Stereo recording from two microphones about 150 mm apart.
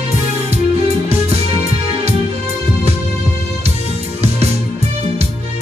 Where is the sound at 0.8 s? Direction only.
45° right (ahead or behind).